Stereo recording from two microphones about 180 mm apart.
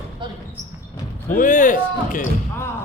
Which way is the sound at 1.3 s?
45° left (ahead or behind).